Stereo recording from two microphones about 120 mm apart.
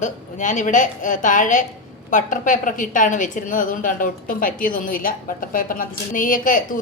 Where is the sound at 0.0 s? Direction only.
90° left.